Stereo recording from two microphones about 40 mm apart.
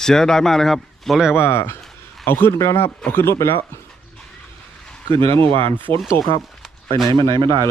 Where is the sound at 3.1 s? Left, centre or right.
Left.